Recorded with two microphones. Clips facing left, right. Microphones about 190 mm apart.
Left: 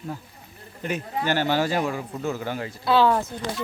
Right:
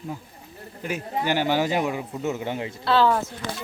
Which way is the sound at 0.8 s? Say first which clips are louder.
Even; 10° right (ahead or behind).